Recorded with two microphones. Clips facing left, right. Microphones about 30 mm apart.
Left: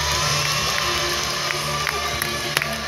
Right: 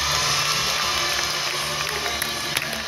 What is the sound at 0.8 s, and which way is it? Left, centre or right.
Music, centre.